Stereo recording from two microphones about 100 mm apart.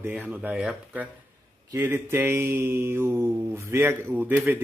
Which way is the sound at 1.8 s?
20° right (ahead or behind).